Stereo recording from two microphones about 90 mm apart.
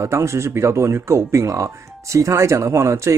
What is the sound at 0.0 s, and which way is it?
Speech, 30° right (ahead or behind).